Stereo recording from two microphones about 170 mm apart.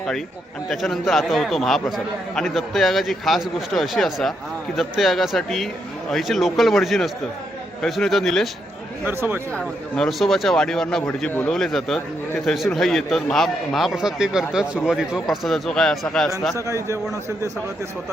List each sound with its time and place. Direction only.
0.7 s speech: centre (ahead or behind)
9.0 s a man's voice: 10° right (ahead or behind)
9.5 s speech: 5° left (ahead or behind)
16.6 s a man's voice: 20° right (ahead or behind)